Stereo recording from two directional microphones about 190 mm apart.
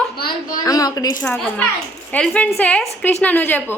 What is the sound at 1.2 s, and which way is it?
A woman's voice, 5° left (ahead or behind).